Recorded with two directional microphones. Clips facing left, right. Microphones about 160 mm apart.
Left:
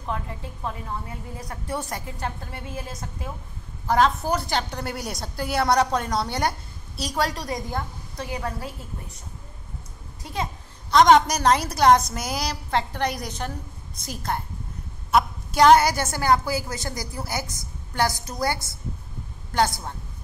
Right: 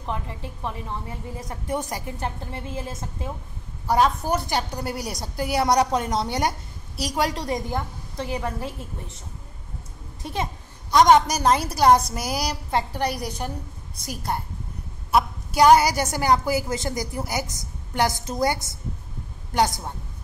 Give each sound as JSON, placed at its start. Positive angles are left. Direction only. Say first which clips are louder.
{"t": 0.0, "sound": "a woman's voice", "louder": "even", "side_deg": -20}
{"t": 3.8, "sound": "a woman's voice", "louder": "even", "side_deg": -10}
{"t": 10.2, "sound": "a sound", "louder": "right 1 dB", "side_deg": -20}
{"t": 11.0, "sound": "a woman's voice", "louder": "even", "side_deg": -10}